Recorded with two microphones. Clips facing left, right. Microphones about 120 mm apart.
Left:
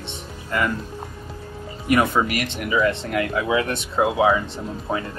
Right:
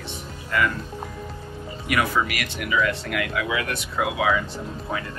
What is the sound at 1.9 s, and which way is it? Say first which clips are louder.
Speech: left 4 dB; 30° left (ahead or behind).